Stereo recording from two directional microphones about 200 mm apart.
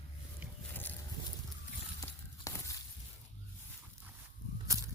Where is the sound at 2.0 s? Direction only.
15° left (ahead or behind).